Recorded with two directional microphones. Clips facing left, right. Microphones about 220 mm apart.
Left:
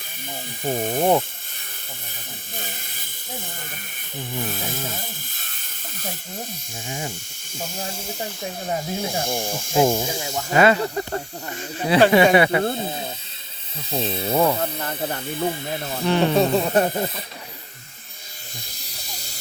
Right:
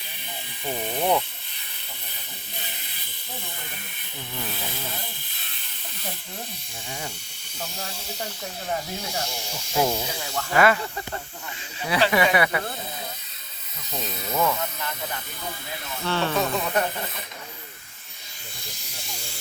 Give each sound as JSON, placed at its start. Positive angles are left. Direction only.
{"t": 0.6, "sound": "speech", "side_deg": 45}
{"t": 2.6, "sound": "speech", "side_deg": 45}
{"t": 6.8, "sound": "speech", "side_deg": 25}
{"t": 7.6, "sound": "speech", "side_deg": 50}
{"t": 10.3, "sound": "speech", "side_deg": 25}
{"t": 10.8, "sound": "speech", "side_deg": 40}
{"t": 12.1, "sound": "speech", "side_deg": 25}
{"t": 16.0, "sound": "music", "side_deg": 15}
{"t": 16.3, "sound": "speech", "side_deg": 30}
{"t": 18.8, "sound": "electric shaver", "side_deg": 35}